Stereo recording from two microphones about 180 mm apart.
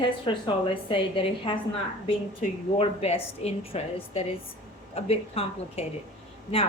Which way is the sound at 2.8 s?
35° left (ahead or behind).